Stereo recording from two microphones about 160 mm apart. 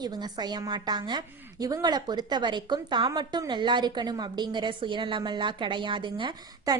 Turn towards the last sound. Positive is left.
turn(degrees=-30)  # may be behind; listen again after turning